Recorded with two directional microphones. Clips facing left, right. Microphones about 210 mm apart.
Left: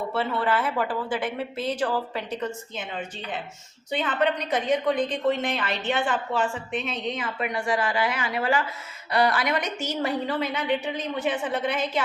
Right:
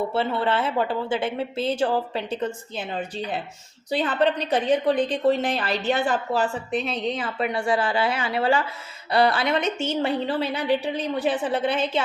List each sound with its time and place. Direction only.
0.1 s a woman's voice: 25° right (ahead or behind)